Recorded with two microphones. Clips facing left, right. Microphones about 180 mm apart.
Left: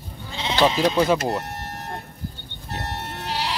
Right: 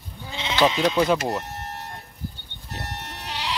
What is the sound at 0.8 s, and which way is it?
Speech, centre (ahead or behind).